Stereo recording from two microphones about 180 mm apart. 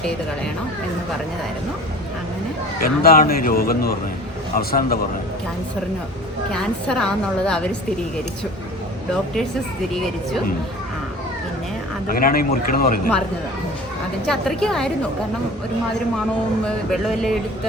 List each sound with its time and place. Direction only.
2.8 s speech: 55° left (ahead or behind)
6.5 s a woman's voice: 5° left (ahead or behind)
12.2 s speech: 55° left (ahead or behind)
14.3 s a woman's voice: 5° left (ahead or behind)
16.6 s a woman's voice: centre (ahead or behind)